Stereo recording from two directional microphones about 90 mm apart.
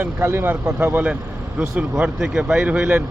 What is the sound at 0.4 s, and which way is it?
Speech, 20° right (ahead or behind).